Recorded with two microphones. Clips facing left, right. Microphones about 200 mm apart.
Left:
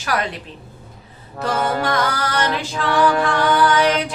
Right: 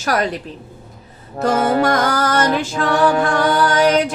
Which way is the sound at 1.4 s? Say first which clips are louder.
Right 5 dB; 35° right (ahead or behind).